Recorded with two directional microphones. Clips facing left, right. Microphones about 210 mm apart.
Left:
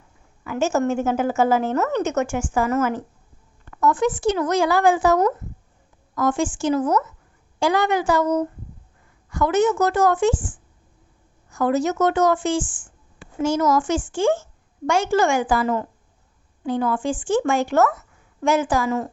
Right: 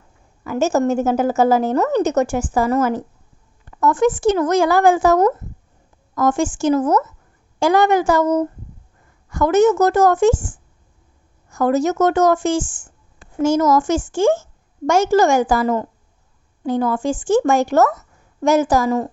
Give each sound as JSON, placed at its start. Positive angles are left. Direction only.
{"t": 0.4, "sound": "a woman's voice", "side_deg": -40}